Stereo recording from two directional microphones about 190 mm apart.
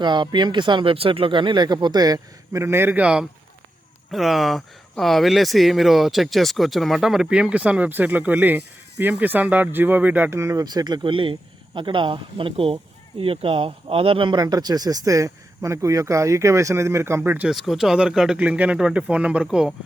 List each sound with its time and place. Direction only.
0.0 s speech: 25° right (ahead or behind); by 19.7 s 5° right (ahead or behind)